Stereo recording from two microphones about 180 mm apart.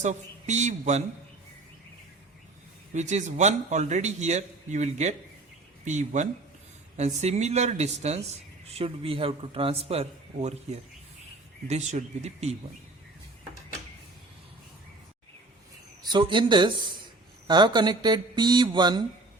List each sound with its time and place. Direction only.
0.0 s a man's voice: 40° right (ahead or behind)
2.9 s a man's voice: 40° right (ahead or behind)
16.0 s speech: 25° right (ahead or behind)